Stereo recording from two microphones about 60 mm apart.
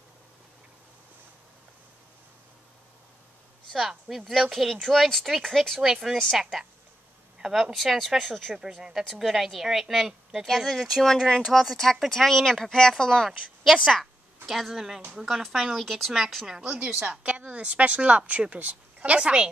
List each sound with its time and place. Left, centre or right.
4.1 s a woman's voice: centre
7.3 s a sound: centre
7.7 s a woman's voice: centre
11.7 s speech: centre
16.6 s a woman's voice: right